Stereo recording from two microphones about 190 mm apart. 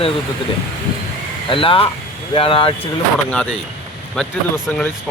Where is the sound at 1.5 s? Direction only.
30° left (ahead or behind).